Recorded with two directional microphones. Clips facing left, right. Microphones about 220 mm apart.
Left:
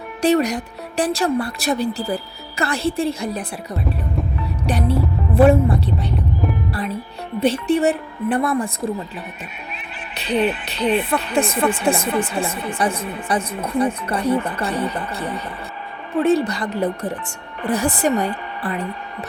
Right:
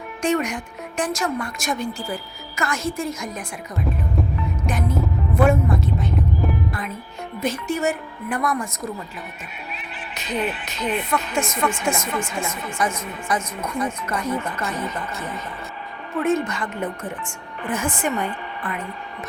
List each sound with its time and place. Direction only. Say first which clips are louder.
0.2 s speech: left 5 dB; 35° left (ahead or behind)
4.6 s music: left 5 dB; 35° left (ahead or behind)
7.3 s speech: left 7 dB; 35° left (ahead or behind)
10.2 s a woman's voice: left 6 dB; 30° left (ahead or behind)